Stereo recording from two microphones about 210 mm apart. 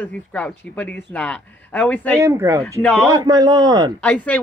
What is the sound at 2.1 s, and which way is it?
Speech, 15° right (ahead or behind).